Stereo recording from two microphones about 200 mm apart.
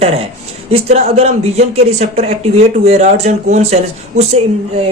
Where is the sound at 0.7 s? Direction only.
30° right (ahead or behind).